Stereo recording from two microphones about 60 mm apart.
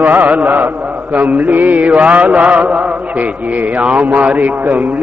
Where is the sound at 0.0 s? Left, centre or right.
Right.